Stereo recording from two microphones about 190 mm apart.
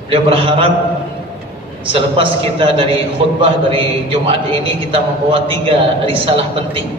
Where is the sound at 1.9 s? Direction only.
30° right (ahead or behind).